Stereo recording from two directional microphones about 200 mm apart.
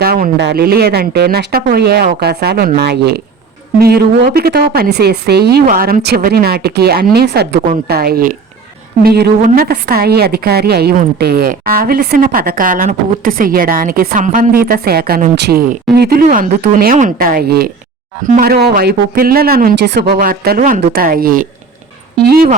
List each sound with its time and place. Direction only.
0.0 s a woman's voice: 50° right (ahead or behind)